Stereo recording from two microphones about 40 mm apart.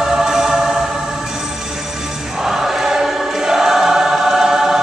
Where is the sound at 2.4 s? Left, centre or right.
Centre.